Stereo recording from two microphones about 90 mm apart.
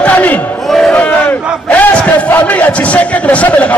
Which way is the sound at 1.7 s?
15° left (ahead or behind).